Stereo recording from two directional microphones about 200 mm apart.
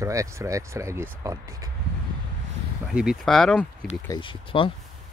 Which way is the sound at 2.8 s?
5° right (ahead or behind).